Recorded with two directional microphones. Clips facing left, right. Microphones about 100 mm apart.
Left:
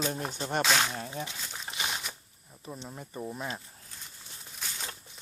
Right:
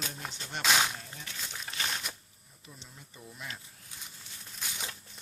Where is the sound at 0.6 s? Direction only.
5° right (ahead or behind).